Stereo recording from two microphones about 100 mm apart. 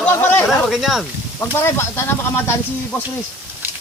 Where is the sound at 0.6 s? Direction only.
5° right (ahead or behind).